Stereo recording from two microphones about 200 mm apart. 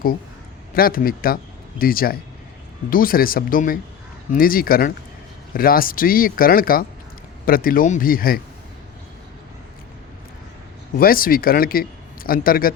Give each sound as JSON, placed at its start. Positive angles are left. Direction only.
{"t": 0.7, "sound": "a man's voice", "side_deg": 45}
{"t": 10.9, "sound": "a man's voice", "side_deg": 45}